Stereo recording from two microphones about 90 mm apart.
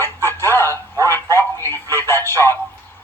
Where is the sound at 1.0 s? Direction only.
25° left (ahead or behind).